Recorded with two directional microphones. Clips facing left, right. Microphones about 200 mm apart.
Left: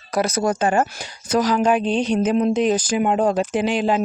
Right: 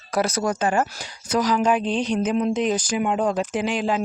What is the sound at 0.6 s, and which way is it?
Speech, 55° left (ahead or behind).